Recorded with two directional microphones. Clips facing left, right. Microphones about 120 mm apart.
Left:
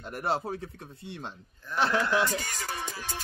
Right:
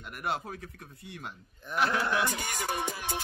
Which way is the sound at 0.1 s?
30° left (ahead or behind).